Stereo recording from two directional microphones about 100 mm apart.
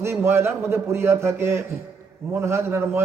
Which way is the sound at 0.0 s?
25° right (ahead or behind).